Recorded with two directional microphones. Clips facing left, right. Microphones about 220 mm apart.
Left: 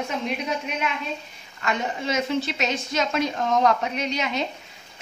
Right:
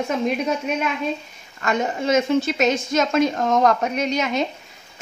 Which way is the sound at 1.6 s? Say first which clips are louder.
Right 5 dB; 45° right (ahead or behind).